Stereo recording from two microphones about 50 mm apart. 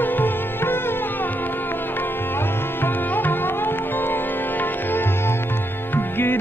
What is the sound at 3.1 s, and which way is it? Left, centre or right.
Music, left.